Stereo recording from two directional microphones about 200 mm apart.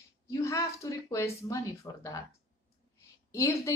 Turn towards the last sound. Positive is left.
turn(degrees=15)  # may be behind; listen again after turning